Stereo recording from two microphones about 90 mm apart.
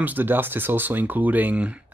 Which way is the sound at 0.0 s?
20° right (ahead or behind).